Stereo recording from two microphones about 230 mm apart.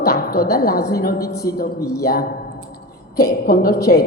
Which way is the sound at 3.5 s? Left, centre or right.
Left.